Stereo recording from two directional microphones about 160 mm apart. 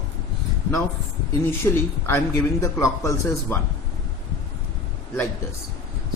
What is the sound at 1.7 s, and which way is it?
A man's voice, 15° left (ahead or behind).